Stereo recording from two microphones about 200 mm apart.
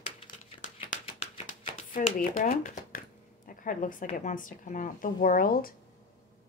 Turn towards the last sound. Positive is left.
turn(degrees=45)  # may be behind; listen again after turning